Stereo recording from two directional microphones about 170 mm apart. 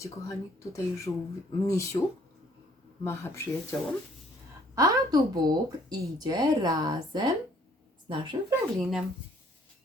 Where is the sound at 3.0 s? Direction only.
15° left (ahead or behind).